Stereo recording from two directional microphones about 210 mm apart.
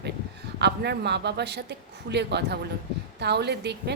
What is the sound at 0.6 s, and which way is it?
A woman's voice, 50° right (ahead or behind).